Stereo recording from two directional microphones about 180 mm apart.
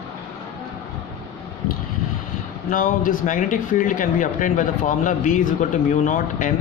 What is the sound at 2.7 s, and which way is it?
Speech, 45° left (ahead or behind).